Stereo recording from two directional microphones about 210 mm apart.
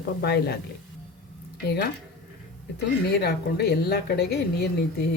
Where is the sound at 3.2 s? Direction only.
50° left (ahead or behind).